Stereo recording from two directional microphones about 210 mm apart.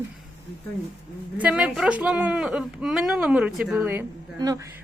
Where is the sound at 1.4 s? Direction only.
5° right (ahead or behind).